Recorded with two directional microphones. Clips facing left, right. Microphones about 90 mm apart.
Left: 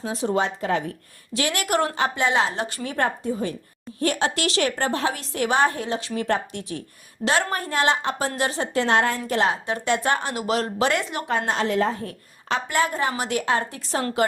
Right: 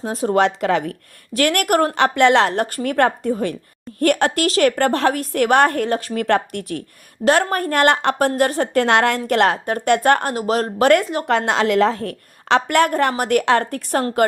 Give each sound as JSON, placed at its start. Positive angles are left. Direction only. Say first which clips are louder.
{"t": 0.0, "sound": "speech", "louder": "right 4 dB", "side_deg": -45}
{"t": 0.3, "sound": "a woman's voice", "louder": "right 8 dB", "side_deg": -80}
{"t": 1.3, "sound": "a woman's voice", "louder": "right 6 dB", "side_deg": -60}
{"t": 2.0, "sound": "a woman's voice", "louder": "right 8 dB", "side_deg": -70}
{"t": 4.0, "sound": "a woman's voice", "louder": "right 6 dB", "side_deg": -55}
{"t": 4.4, "sound": "a woman's voice", "louder": "right 7 dB", "side_deg": -45}
{"t": 6.2, "sound": "a woman's voice", "louder": "right 6 dB", "side_deg": -65}
{"t": 9.7, "sound": "a woman's voice", "louder": "right 7 dB", "side_deg": -55}
{"t": 10.3, "sound": "speech", "louder": "right 4 dB", "side_deg": -40}
{"t": 10.8, "sound": "speech", "louder": "right 11 dB", "side_deg": -50}
{"t": 11.3, "sound": "a woman's voice", "louder": "right 6 dB", "side_deg": -80}